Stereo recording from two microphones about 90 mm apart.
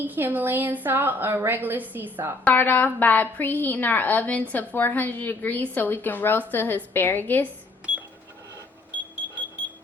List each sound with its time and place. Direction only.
0.0 s a woman's voice: 20° right (ahead or behind)
2.4 s a woman's voice: 20° left (ahead or behind)